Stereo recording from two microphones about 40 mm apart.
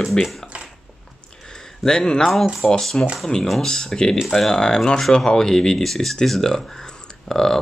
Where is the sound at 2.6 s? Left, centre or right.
Left.